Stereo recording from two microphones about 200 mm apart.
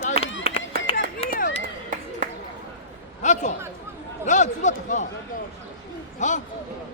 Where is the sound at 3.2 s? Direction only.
35° left (ahead or behind).